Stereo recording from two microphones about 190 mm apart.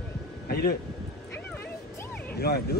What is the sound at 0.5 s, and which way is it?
Speech, 55° left (ahead or behind).